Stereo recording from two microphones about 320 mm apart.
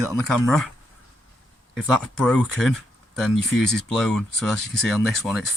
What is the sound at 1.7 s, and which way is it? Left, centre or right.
Speech, centre.